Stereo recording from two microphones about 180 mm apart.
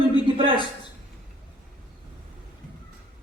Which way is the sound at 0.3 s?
30° right (ahead or behind).